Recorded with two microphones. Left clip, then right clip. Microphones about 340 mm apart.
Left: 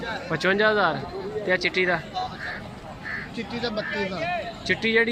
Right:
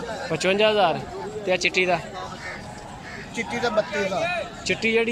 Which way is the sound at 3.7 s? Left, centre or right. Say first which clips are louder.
Right 5 dB; right.